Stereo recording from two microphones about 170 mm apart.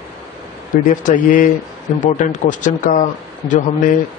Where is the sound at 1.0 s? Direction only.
50° left (ahead or behind).